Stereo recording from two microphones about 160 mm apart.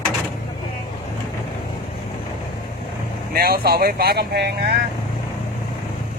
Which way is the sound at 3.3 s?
70° right (ahead or behind).